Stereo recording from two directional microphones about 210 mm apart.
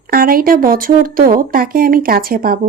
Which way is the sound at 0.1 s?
45° right (ahead or behind).